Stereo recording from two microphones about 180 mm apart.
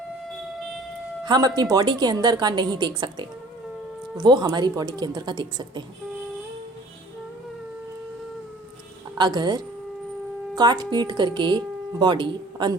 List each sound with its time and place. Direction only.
1.2 s speech: 25° right (ahead or behind)
9.1 s speech: 25° right (ahead or behind)